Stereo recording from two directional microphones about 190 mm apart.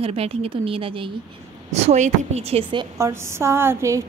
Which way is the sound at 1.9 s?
35° right (ahead or behind).